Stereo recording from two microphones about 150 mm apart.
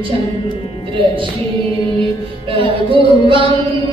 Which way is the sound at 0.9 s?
35° right (ahead or behind).